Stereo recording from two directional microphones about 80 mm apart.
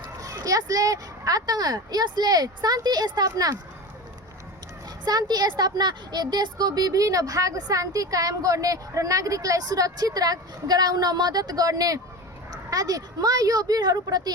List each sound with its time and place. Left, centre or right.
0.2 s a woman's voice: right
5.0 s a woman's voice: right